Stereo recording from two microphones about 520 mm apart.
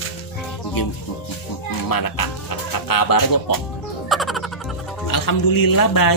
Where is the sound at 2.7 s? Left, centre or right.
Left.